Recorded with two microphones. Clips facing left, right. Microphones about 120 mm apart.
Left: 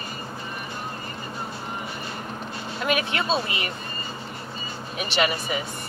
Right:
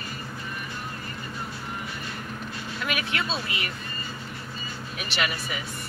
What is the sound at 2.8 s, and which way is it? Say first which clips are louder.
Speech: left 5 dB; 30° left (ahead or behind).